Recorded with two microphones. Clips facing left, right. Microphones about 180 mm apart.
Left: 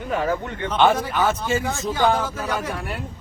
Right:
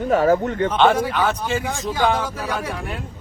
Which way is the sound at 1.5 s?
10° right (ahead or behind).